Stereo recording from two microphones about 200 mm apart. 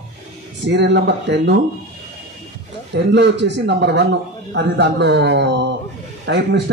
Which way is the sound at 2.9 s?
60° right (ahead or behind).